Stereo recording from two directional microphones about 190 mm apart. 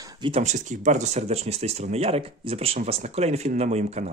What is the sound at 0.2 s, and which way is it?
Speech, 35° right (ahead or behind).